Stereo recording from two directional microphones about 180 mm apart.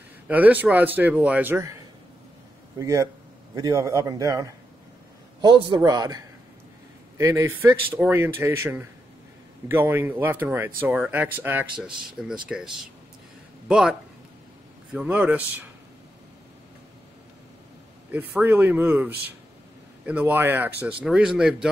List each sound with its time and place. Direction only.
0.3 s speech: 10° right (ahead or behind)
2.8 s a woman's voice: 15° right (ahead or behind)
18.1 s speech: 10° right (ahead or behind)